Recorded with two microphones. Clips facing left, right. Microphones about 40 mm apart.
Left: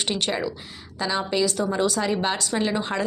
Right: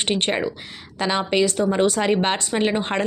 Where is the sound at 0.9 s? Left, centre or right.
Right.